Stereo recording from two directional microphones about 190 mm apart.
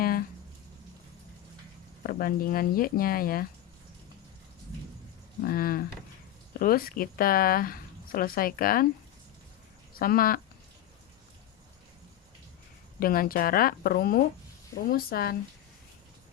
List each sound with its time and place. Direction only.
0.0 s a sound: 50° left (ahead or behind)
2.0 s speech: 50° left (ahead or behind)
5.4 s speech: 50° left (ahead or behind)
10.0 s speech: 50° left (ahead or behind)
13.0 s speech: 50° left (ahead or behind)